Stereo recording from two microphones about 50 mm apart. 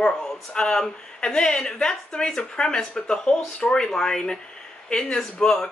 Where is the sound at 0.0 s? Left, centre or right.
Centre.